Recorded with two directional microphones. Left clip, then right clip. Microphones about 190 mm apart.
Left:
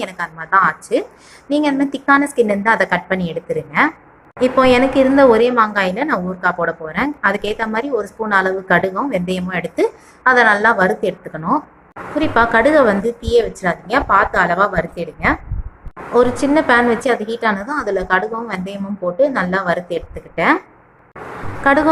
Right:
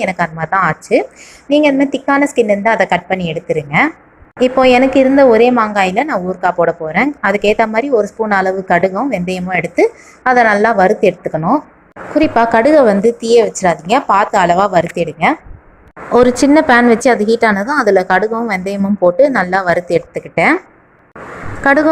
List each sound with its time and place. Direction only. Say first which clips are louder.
0.0 s speech: right 8 dB; 20° right (ahead or behind)
2.0 s speech: right 1 dB; 20° right (ahead or behind)
3.1 s a woman's voice: right 3 dB; 25° left (ahead or behind)
3.4 s a woman's voice: right 3 dB; 20° right (ahead or behind)
16.1 s a woman's voice: right 5 dB; 40° right (ahead or behind)
21.6 s speech: right 3 dB; 30° right (ahead or behind)